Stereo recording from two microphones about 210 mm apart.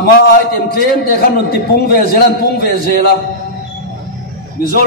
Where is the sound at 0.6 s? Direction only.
45° left (ahead or behind).